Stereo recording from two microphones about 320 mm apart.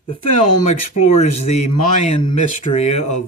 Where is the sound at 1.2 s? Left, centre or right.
Centre.